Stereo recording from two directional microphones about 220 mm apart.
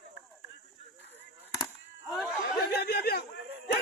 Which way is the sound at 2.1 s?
Centre (ahead or behind).